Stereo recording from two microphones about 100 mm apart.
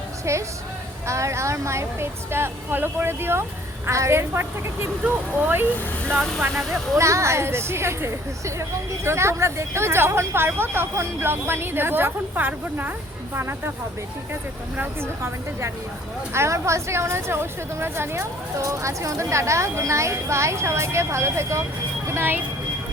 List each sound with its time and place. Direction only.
0.3 s a woman's voice: 30° right (ahead or behind)
7.0 s a woman's voice: 30° right (ahead or behind)
14.8 s a woman's voice: 25° right (ahead or behind)